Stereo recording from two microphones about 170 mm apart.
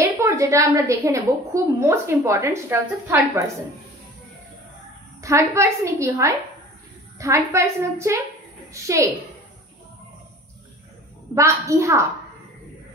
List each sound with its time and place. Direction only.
0.0 s a woman's voice: 15° right (ahead or behind)
5.2 s a woman's voice: 15° right (ahead or behind)
11.3 s a woman's voice: 15° right (ahead or behind)